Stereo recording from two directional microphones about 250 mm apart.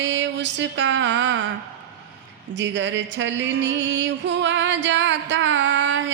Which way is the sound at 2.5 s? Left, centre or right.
Right.